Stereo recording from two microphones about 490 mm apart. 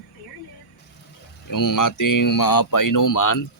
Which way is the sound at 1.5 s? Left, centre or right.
Left.